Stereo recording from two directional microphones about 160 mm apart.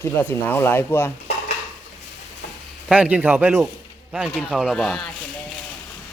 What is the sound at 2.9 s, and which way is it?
Speech, 10° right (ahead or behind).